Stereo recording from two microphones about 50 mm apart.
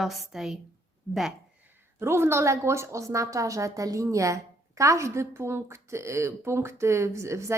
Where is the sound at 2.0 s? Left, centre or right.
Right.